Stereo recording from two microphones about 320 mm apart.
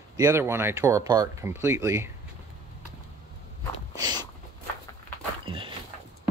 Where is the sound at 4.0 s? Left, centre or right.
Centre.